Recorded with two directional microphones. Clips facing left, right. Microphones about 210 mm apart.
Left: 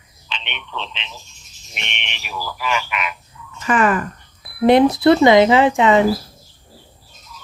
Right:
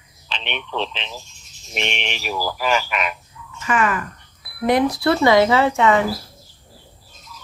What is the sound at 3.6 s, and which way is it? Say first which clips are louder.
Speech: left 4 dB; 35° left (ahead or behind).